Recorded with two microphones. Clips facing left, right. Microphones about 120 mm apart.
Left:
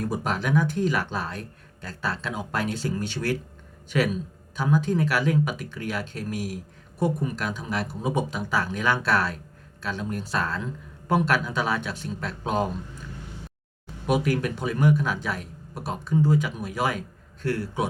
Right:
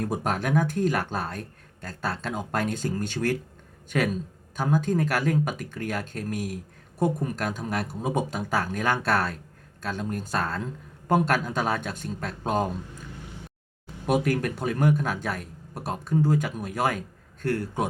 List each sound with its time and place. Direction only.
0.0 s speech: 50° right (ahead or behind)
14.1 s speech: 45° right (ahead or behind)